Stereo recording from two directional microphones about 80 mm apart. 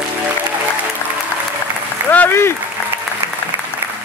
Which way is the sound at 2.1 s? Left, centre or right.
Left.